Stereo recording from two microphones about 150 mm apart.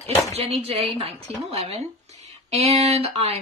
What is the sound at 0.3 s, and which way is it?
Speech, 40° right (ahead or behind).